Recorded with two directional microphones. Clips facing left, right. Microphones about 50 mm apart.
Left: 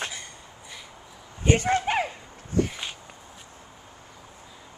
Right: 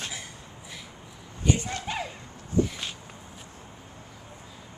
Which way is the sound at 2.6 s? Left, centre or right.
Left.